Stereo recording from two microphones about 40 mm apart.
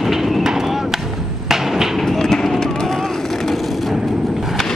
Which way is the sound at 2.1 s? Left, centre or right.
Centre.